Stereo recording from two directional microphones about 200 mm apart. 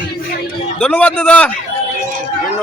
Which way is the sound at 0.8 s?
5° left (ahead or behind).